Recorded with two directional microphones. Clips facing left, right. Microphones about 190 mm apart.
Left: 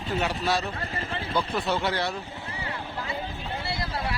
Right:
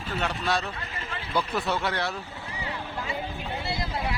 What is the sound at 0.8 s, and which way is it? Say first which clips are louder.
Speech: left 4 dB; 30° left (ahead or behind).